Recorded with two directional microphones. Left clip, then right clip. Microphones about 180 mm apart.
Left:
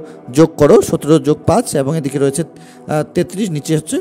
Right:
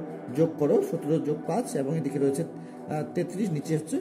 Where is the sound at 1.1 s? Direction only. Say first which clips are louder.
Left 17 dB; 55° left (ahead or behind).